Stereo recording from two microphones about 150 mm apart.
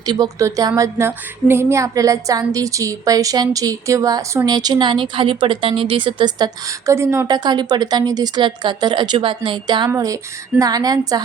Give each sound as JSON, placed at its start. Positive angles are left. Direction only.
{"t": 0.0, "sound": "speech", "side_deg": -25}